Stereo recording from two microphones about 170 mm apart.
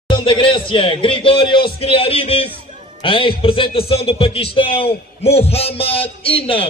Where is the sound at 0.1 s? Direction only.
30° left (ahead or behind).